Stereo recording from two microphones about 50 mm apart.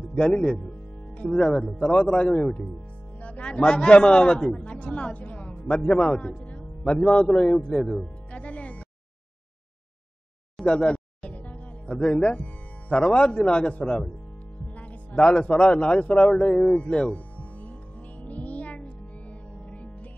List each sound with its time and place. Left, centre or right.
0.2 s a man's voice: centre
0.6 s music: left
1.4 s a man's voice: centre
3.2 s a man's voice: left
4.6 s a woman's voice: left
6.9 s a man's voice: centre
7.7 s speech: centre
8.0 s music: left
10.6 s a man's voice: centre
11.2 s music: left
12.0 s a man's voice: centre
14.8 s music: left
15.2 s a man's voice: left
17.4 s music: left